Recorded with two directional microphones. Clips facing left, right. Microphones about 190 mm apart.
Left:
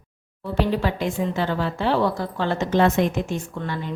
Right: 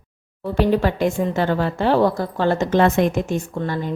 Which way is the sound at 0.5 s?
50° right (ahead or behind).